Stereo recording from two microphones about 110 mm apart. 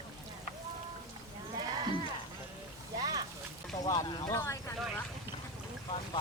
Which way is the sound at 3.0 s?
35° right (ahead or behind).